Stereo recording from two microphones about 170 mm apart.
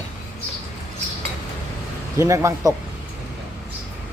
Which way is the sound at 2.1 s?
15° right (ahead or behind).